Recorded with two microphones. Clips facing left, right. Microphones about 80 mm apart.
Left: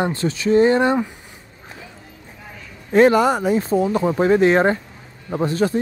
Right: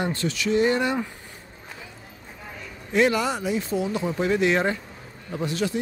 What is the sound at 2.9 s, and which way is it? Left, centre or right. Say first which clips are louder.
Speech: left 8 dB; left.